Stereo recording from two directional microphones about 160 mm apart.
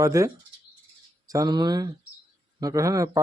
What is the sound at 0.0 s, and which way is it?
Speech, 20° right (ahead or behind).